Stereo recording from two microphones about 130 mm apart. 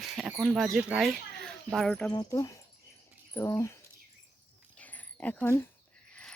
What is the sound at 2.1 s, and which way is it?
Speech, 25° left (ahead or behind).